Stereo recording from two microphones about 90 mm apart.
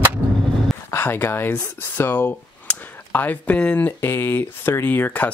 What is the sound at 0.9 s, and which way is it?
Speech, 25° left (ahead or behind).